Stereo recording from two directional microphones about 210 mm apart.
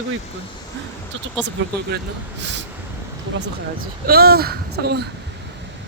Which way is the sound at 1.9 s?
50° right (ahead or behind).